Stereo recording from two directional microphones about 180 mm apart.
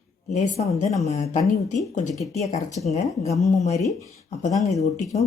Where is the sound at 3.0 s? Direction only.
20° left (ahead or behind).